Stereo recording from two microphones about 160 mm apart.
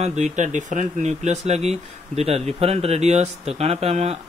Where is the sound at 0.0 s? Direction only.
45° right (ahead or behind).